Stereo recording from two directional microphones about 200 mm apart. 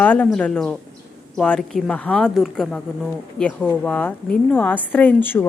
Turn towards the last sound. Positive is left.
turn(degrees=10)  # may be behind; listen again after turning